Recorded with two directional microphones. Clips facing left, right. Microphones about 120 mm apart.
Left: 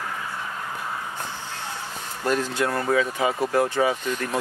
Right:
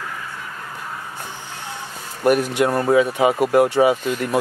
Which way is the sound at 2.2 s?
15° right (ahead or behind).